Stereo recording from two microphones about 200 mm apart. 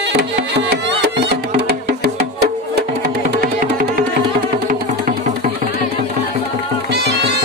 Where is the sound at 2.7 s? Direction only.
55° right (ahead or behind).